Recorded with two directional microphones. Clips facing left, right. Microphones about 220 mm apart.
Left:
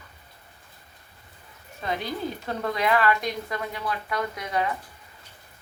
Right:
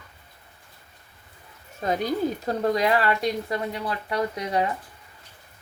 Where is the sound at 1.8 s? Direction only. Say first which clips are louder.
Right 5 dB; 40° right (ahead or behind).